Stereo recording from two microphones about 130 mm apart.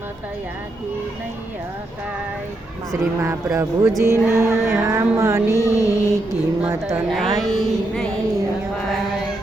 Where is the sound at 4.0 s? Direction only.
20° right (ahead or behind).